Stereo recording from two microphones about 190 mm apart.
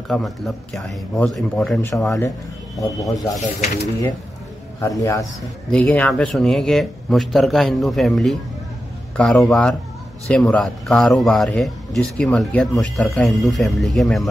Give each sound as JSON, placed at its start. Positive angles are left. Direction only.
{"t": 0.1, "sound": "speech", "side_deg": 0}
{"t": 4.8, "sound": "speech", "side_deg": 15}